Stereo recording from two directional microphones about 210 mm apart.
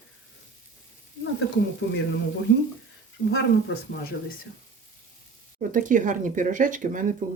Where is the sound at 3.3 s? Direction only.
55° left (ahead or behind).